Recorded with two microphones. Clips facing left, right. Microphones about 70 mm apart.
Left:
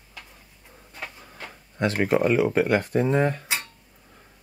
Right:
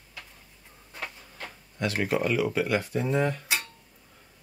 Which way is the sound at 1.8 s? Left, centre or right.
Left.